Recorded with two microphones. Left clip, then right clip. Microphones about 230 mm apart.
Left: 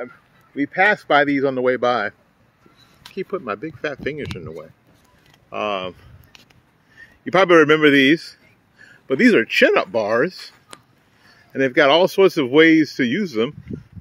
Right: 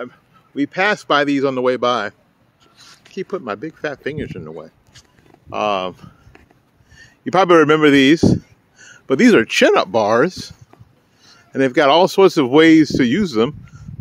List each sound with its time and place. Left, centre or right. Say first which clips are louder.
0.6 s speech: left 1 dB; centre
3.2 s speech: right 1 dB; centre
5.5 s a man's voice: right 5 dB; centre